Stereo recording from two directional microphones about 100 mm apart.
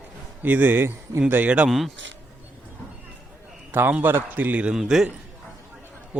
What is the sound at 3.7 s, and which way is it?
A man's voice, 15° right (ahead or behind).